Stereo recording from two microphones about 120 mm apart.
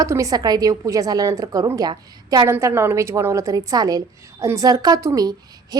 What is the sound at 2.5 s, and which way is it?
A woman's voice, 20° right (ahead or behind).